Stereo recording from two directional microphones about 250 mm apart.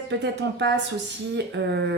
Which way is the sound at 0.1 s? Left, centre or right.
Right.